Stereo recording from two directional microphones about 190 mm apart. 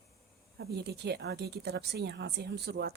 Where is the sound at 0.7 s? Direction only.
60° right (ahead or behind).